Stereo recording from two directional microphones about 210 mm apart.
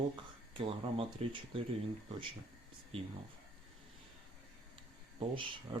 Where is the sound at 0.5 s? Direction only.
25° right (ahead or behind).